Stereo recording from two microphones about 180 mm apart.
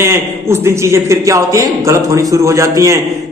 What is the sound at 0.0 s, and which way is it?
A man's voice, 15° right (ahead or behind).